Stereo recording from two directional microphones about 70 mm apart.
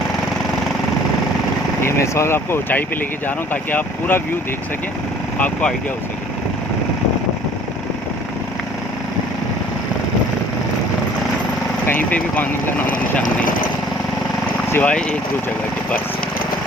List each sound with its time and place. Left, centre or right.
1.8 s speech: left
5.4 s speech: centre
11.9 s speech: left
14.8 s speech: centre